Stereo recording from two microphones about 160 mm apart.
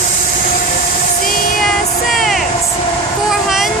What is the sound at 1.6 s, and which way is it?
Music, centre (ahead or behind).